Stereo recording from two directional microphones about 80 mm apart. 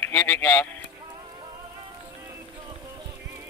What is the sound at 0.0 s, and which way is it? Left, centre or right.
Speech, left.